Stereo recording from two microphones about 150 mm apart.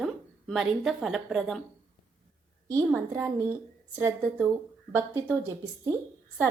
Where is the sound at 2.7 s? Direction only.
20° right (ahead or behind).